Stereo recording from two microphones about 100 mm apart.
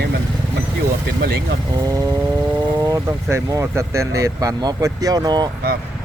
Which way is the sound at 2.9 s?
30° right (ahead or behind).